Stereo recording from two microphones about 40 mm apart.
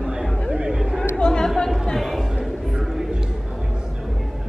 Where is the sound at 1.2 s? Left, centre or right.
Centre.